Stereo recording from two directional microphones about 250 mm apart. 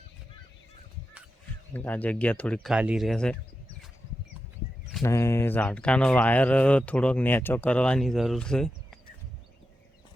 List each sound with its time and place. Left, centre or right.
1.7 s speech: centre
5.0 s speech: centre